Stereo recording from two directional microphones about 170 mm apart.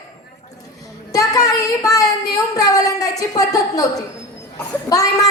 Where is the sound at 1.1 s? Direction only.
20° left (ahead or behind).